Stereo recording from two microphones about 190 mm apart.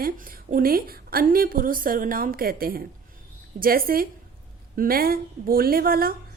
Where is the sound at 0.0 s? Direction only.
50° right (ahead or behind).